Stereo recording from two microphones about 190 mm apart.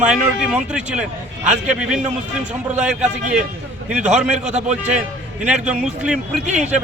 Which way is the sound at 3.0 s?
40° right (ahead or behind).